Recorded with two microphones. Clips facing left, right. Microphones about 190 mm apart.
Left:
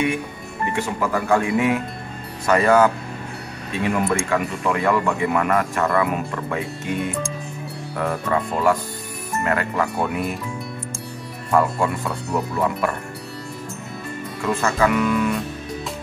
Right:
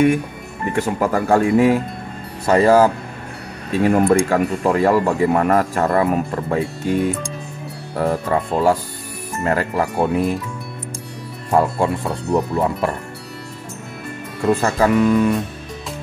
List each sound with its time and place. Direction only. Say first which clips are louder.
0.7 s a man's voice: right 5 dB; 45° right (ahead or behind)
3.7 s a man's voice: right 7 dB; 40° right (ahead or behind)
11.5 s speech: right 2 dB; 30° right (ahead or behind)
14.5 s a man's voice: right 4 dB; 35° right (ahead or behind)